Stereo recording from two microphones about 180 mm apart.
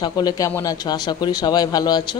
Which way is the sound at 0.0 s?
20° left (ahead or behind).